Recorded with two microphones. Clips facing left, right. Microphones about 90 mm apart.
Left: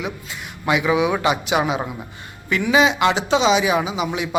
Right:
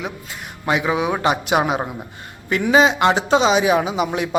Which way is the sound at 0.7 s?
35° right (ahead or behind).